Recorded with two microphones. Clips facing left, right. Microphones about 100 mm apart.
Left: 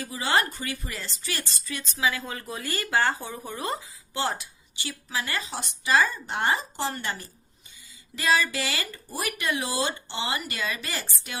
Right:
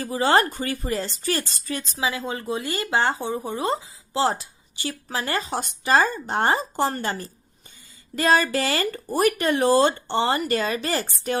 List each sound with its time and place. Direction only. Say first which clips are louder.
0.0 s speech: right 6 dB; 40° right (ahead or behind)
1.9 s speech: even; 25° right (ahead or behind); by 11.3 s 45° right (ahead or behind)